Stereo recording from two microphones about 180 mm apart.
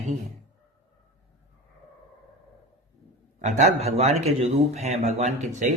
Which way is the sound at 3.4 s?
40° right (ahead or behind).